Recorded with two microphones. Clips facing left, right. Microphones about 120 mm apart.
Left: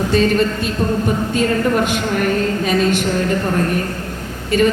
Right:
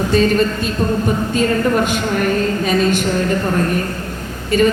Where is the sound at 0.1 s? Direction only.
40° right (ahead or behind).